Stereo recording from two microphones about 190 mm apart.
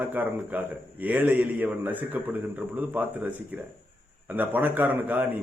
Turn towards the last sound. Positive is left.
turn(degrees=-10)  # may be behind; listen again after turning